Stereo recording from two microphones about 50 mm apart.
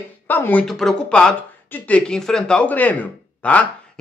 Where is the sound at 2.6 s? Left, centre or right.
Left.